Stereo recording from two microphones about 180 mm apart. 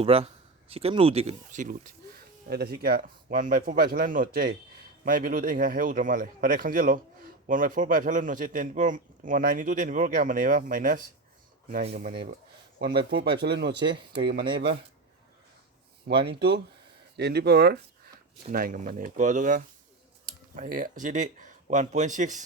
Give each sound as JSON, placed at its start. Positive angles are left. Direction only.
{"t": 0.0, "sound": "speech", "side_deg": -30}
{"t": 2.5, "sound": "speech", "side_deg": -60}
{"t": 13.1, "sound": "speech", "side_deg": -65}
{"t": 14.4, "sound": "speech", "side_deg": -30}
{"t": 17.2, "sound": "speech", "side_deg": -65}
{"t": 18.5, "sound": "speech", "side_deg": -50}